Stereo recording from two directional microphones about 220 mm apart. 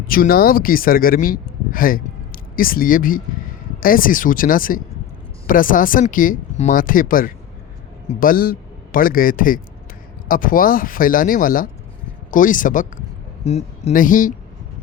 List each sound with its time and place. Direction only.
0.1 s a man's voice: 40° left (ahead or behind)